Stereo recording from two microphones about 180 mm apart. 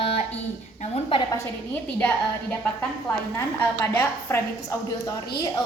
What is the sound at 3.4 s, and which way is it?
A woman's voice, 15° left (ahead or behind).